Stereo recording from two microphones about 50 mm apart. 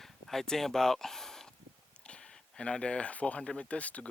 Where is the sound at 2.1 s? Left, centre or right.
Centre.